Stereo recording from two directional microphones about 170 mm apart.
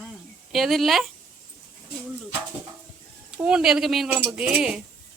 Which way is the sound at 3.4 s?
5° right (ahead or behind).